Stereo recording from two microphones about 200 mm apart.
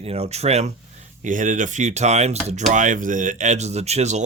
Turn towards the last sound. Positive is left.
turn(degrees=-35)  # may be behind; listen again after turning